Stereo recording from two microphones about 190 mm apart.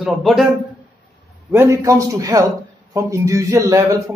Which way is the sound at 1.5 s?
15° right (ahead or behind).